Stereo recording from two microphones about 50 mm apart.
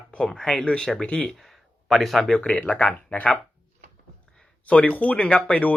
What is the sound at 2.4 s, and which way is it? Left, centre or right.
Speech, centre.